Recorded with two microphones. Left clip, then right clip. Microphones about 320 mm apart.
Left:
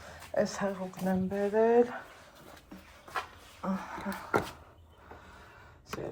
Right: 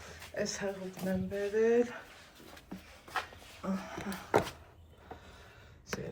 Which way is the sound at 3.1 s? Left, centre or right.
Centre.